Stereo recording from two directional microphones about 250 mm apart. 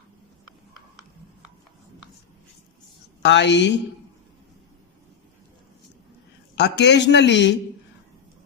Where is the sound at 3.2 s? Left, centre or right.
Left.